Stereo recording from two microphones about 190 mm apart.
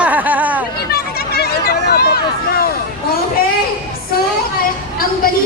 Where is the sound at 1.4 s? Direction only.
55° left (ahead or behind).